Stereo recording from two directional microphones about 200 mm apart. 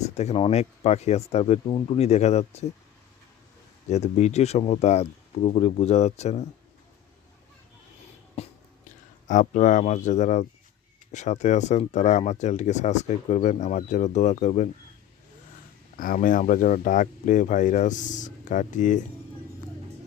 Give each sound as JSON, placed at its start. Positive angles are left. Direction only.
{"t": 0.1, "sound": "speech", "side_deg": 35}
{"t": 3.8, "sound": "speech", "side_deg": 35}
{"t": 8.4, "sound": "a sound", "side_deg": 30}
{"t": 9.2, "sound": "speech", "side_deg": 40}
{"t": 16.0, "sound": "speech", "side_deg": 45}